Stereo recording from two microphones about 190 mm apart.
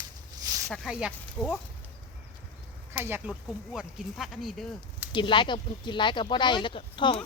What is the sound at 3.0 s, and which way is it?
Speech, 10° right (ahead or behind).